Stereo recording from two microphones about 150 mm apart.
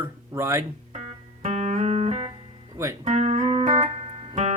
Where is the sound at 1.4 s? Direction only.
50° right (ahead or behind).